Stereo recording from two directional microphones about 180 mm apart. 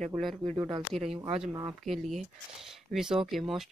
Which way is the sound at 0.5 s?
25° right (ahead or behind).